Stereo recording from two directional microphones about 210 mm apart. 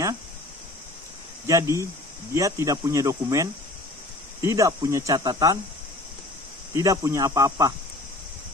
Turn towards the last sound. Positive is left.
turn(degrees=-15)  # may be behind; listen again after turning